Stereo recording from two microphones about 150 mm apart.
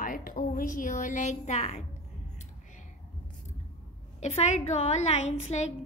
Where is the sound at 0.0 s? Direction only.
70° left (ahead or behind); by 1.9 s 50° left (ahead or behind).